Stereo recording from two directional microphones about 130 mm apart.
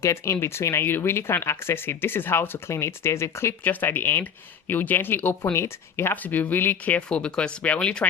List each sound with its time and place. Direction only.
0.0 s speech: 20° left (ahead or behind)